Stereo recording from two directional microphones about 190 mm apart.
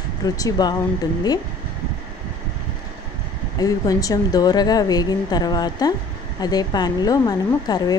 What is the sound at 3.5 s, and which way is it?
Speech, 20° left (ahead or behind).